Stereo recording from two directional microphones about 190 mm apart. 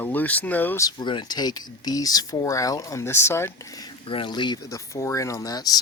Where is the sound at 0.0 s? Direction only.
10° left (ahead or behind).